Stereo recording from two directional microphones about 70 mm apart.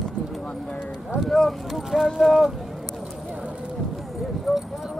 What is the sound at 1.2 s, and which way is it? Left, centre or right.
Speech, centre.